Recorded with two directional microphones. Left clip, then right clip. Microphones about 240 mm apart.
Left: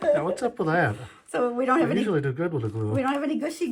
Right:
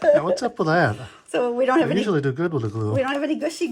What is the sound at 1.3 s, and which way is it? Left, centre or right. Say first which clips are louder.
Speech: right 4 dB; right.